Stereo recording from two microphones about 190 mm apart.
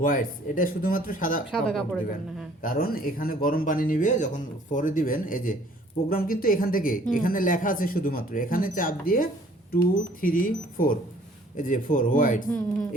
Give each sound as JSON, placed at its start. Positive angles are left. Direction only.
{"t": 0.0, "sound": "speech", "side_deg": 45}
{"t": 1.5, "sound": "speech", "side_deg": 0}
{"t": 2.6, "sound": "speech", "side_deg": 50}